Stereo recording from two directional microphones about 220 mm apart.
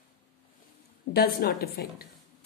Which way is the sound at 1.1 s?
45° left (ahead or behind).